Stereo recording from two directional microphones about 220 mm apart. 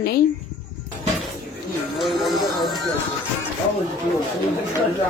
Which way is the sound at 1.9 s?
Centre (ahead or behind).